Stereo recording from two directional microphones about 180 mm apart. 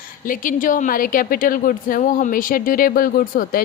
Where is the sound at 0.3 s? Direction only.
50° left (ahead or behind).